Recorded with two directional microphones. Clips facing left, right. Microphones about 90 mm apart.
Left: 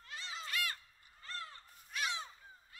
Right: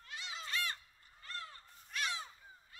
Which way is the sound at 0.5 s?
30° right (ahead or behind).